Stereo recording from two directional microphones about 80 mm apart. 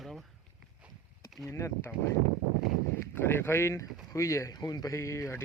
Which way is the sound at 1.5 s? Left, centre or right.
Left.